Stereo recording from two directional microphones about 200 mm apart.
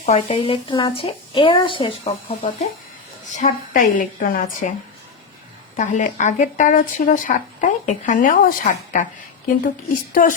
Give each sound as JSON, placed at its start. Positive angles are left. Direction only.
{"t": 0.0, "sound": "speech", "side_deg": 30}
{"t": 3.3, "sound": "a woman's voice", "side_deg": 40}
{"t": 5.7, "sound": "speech", "side_deg": 40}